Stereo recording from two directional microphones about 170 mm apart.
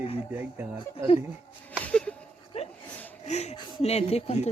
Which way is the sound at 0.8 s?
35° left (ahead or behind).